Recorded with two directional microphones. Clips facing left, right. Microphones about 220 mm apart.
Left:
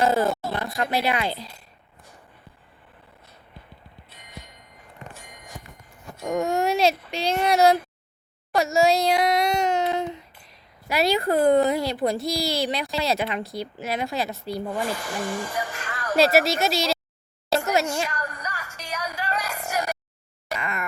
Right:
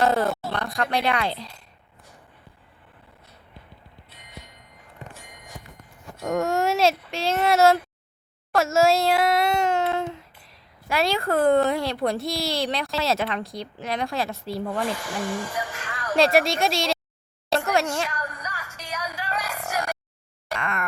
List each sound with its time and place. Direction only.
0.0 s speech: centre (ahead or behind)
6.2 s speech: centre (ahead or behind)
11.1 s speech: 15° left (ahead or behind)
11.4 s speech: centre (ahead or behind)
14.8 s speech: 40° left (ahead or behind)
16.1 s speech: 5° left (ahead or behind)
17.5 s a sound: centre (ahead or behind)
18.1 s music: 45° left (ahead or behind)
20.5 s a sound: centre (ahead or behind)